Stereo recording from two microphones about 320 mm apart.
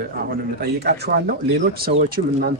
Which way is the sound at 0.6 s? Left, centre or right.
Right.